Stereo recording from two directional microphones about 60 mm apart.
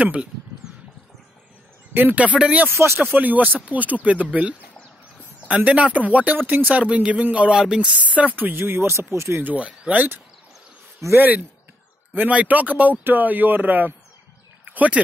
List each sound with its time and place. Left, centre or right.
0.0 s speech: right
2.0 s speech: right
2.2 s speech: centre
2.7 s speech: right
3.2 s speech: right
8.6 s speech: right
9.4 s speech: right
14.7 s a sound: right